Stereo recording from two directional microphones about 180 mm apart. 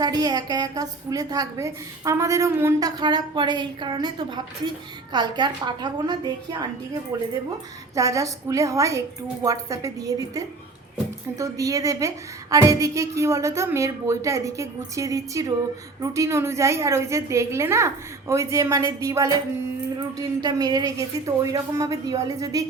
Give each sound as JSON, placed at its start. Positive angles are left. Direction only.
{"t": 0.0, "sound": "a woman's voice", "side_deg": -20}
{"t": 7.9, "sound": "a woman's voice", "side_deg": -20}